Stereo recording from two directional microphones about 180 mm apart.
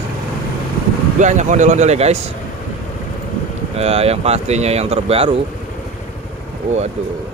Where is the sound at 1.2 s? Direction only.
40° right (ahead or behind).